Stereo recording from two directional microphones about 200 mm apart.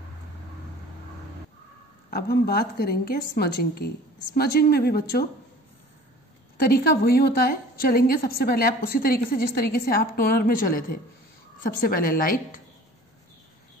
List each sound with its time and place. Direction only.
2.0 s a woman's voice: 50° left (ahead or behind)
6.6 s a woman's voice: 50° left (ahead or behind)